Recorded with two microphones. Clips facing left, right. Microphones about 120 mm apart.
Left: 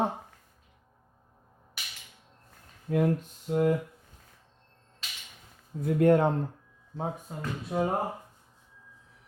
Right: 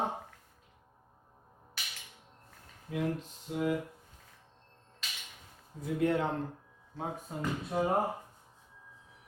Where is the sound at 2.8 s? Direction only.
50° left (ahead or behind).